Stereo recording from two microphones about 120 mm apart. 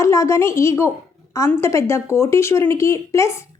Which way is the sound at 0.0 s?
25° left (ahead or behind).